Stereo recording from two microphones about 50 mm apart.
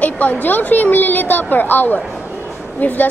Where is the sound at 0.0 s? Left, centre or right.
Left.